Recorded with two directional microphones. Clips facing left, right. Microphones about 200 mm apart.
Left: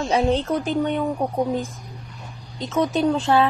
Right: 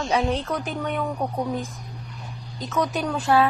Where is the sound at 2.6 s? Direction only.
25° left (ahead or behind).